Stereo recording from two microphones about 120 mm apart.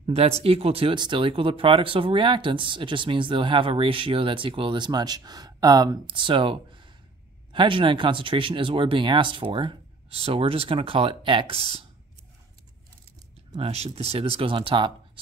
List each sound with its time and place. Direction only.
0.0 s speech: 55° right (ahead or behind)
0.9 s speech: 40° right (ahead or behind)
13.6 s speech: 55° right (ahead or behind)